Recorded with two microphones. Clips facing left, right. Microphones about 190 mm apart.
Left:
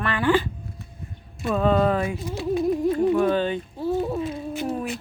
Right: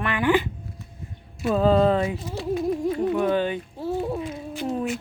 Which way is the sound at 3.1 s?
15° right (ahead or behind).